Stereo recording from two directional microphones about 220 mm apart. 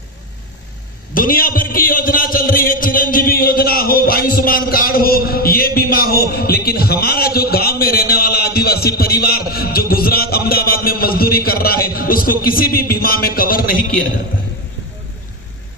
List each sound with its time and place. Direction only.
1.1 s a man's voice: 40° left (ahead or behind)